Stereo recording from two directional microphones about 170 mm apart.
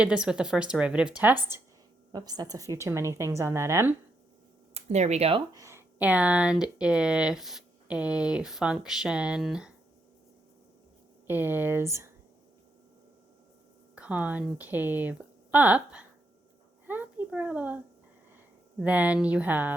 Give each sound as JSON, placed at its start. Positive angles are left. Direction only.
{"t": 0.0, "sound": "speech", "side_deg": -5}
{"t": 2.1, "sound": "a woman's voice", "side_deg": -25}
{"t": 4.7, "sound": "speech", "side_deg": -40}
{"t": 5.5, "sound": "speech", "side_deg": -15}
{"t": 11.3, "sound": "a woman's voice", "side_deg": -10}
{"t": 13.9, "sound": "a woman's voice", "side_deg": -5}
{"t": 16.8, "sound": "a sound", "side_deg": -10}
{"t": 18.8, "sound": "a woman's voice", "side_deg": -10}